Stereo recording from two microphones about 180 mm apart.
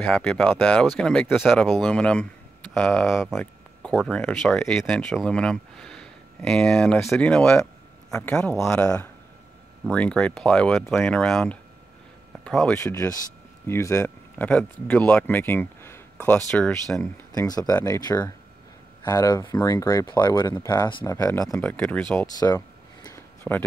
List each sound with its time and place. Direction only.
0.0 s speech: 5° left (ahead or behind)
12.7 s speech: 20° left (ahead or behind)
21.4 s speech: 5° left (ahead or behind)
23.0 s a sound: 10° left (ahead or behind)